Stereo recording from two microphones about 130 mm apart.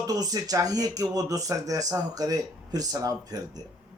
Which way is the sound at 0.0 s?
30° right (ahead or behind).